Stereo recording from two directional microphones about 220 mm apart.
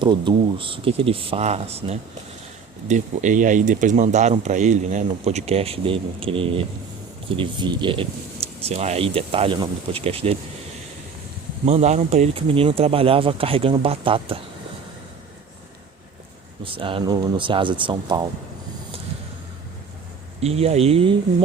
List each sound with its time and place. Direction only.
0.0 s speech: 20° right (ahead or behind)
11.6 s speech: 30° right (ahead or behind)
16.6 s speech: 25° right (ahead or behind)
20.4 s speech: 30° right (ahead or behind)